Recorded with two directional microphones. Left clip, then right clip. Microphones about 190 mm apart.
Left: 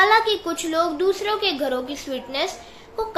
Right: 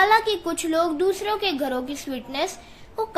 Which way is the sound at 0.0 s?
25° right (ahead or behind).